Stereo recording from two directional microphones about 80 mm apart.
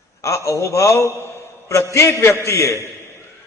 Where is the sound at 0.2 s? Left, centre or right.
Left.